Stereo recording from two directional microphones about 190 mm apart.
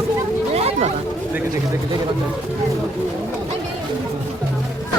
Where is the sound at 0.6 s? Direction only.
30° right (ahead or behind).